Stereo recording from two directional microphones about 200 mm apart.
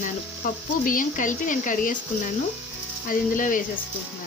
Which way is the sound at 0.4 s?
40° left (ahead or behind).